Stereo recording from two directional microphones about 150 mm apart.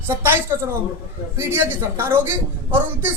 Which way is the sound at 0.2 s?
15° right (ahead or behind).